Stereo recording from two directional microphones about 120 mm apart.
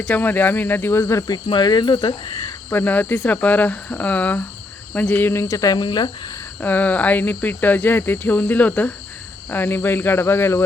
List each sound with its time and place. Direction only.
0.0 s speech: 15° left (ahead or behind)
1.3 s speech: 40° left (ahead or behind)
2.6 s speech: 15° left (ahead or behind); by 6.1 s 40° left (ahead or behind)
6.6 s speech: 15° left (ahead or behind)